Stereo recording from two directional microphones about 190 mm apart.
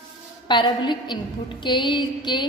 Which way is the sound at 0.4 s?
25° left (ahead or behind).